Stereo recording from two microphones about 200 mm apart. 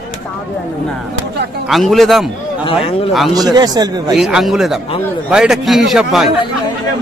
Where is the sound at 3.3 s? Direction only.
20° right (ahead or behind).